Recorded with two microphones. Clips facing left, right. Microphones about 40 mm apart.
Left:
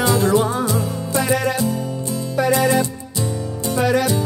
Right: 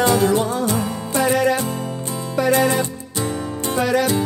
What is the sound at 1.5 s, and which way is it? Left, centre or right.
Music, right.